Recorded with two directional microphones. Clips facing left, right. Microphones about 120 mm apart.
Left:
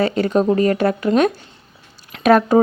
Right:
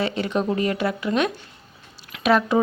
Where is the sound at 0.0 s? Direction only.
40° left (ahead or behind).